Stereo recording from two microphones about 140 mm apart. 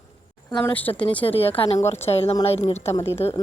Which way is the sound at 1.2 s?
45° left (ahead or behind).